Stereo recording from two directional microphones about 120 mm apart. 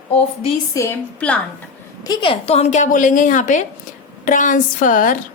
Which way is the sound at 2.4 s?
60° left (ahead or behind).